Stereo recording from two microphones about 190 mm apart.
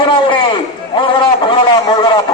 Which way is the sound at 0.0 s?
25° left (ahead or behind).